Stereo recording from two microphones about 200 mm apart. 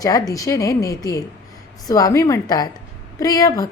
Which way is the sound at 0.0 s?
15° left (ahead or behind).